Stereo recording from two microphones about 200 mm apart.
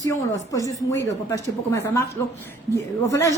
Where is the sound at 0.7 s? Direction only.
15° left (ahead or behind).